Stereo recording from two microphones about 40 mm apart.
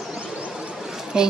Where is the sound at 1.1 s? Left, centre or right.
Centre.